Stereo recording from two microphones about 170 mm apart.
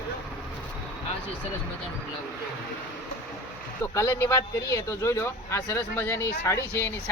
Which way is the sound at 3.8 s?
15° left (ahead or behind).